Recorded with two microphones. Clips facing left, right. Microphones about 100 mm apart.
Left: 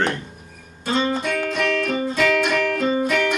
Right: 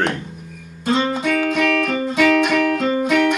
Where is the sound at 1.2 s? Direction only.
65° right (ahead or behind).